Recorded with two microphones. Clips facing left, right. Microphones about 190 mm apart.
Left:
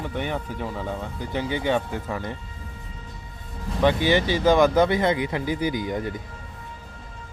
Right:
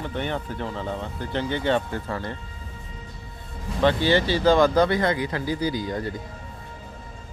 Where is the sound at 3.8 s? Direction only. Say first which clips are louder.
Even; 15° left (ahead or behind).